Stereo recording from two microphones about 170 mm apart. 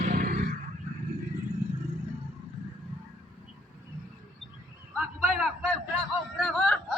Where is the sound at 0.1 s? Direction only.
60° right (ahead or behind).